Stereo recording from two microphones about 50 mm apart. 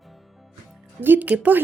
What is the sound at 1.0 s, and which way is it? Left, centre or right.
Speech, right.